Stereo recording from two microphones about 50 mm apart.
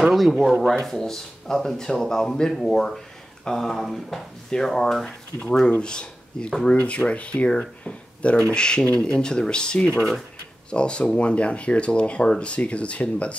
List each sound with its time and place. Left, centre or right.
0.0 s speech: centre
2.5 s speech: centre
5.7 s speech: centre
6.8 s speech: left
7.1 s speech: left